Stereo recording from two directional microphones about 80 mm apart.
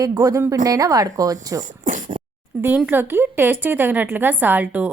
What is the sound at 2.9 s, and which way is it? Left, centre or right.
A woman's voice, right.